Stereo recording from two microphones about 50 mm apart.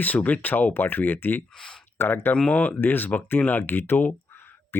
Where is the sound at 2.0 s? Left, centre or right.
Left.